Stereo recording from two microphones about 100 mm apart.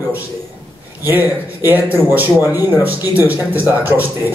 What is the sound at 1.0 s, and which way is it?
Speech, 20° right (ahead or behind).